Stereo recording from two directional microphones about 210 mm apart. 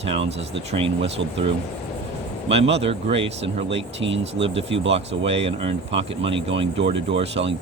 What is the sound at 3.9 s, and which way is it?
Speech, 60° right (ahead or behind).